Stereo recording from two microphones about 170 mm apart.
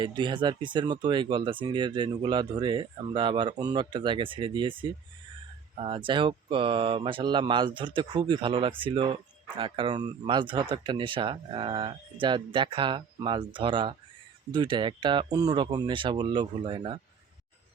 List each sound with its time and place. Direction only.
0.0 s speech: 30° right (ahead or behind)